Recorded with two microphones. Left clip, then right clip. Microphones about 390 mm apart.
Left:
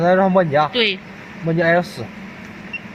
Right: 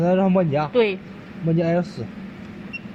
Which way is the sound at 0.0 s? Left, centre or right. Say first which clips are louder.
Left 5 dB; left.